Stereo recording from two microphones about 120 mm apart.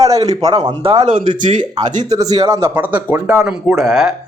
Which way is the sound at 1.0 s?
90° right.